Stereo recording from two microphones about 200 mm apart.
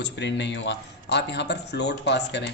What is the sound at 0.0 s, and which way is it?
A man's voice, 60° left (ahead or behind).